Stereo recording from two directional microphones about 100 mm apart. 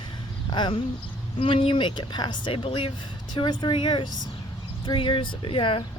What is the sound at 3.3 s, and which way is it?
Speech, 50° left (ahead or behind).